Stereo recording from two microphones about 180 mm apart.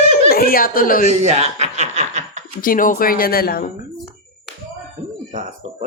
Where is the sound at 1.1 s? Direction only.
35° right (ahead or behind).